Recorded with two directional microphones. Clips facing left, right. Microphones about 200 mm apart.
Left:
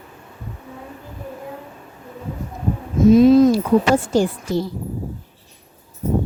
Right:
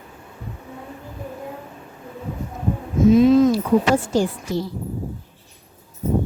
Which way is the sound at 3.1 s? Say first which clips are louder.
Left 3 dB; 35° left (ahead or behind).